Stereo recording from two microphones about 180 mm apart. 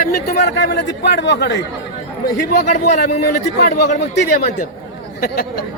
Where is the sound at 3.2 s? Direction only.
60° left (ahead or behind).